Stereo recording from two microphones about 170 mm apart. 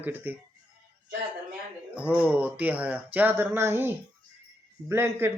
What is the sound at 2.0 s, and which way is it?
Speech, 10° right (ahead or behind).